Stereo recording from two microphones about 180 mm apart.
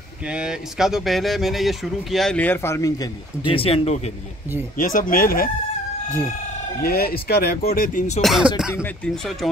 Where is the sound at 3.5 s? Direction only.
30° left (ahead or behind).